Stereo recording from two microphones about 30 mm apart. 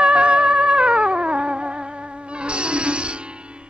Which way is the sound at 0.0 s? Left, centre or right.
Right.